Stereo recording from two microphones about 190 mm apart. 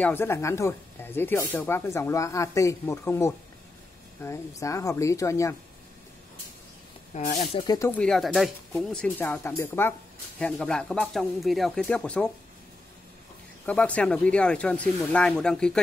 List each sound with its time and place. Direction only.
0.0 s speech: 10° left (ahead or behind)
7.2 s speech: 45° left (ahead or behind)
7.5 s speech: 20° left (ahead or behind)
7.9 s speech: 5° left (ahead or behind)
13.7 s speech: 5° left (ahead or behind)